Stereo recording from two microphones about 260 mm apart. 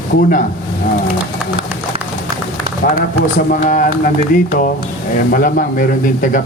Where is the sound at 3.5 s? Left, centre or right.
Left.